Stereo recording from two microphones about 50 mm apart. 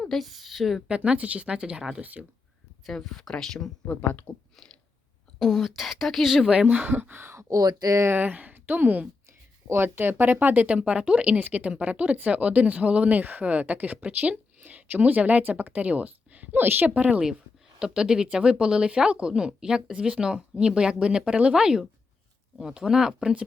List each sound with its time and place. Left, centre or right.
0.2 s speech: centre
0.9 s speech: right
2.0 s speech: right
2.8 s speech: centre
3.8 s speech: left
5.4 s speech: centre
6.3 s speech: centre
6.7 s speech: right
7.3 s speech: right
8.1 s a woman's voice: right
9.6 s speech: right
10.7 s speech: right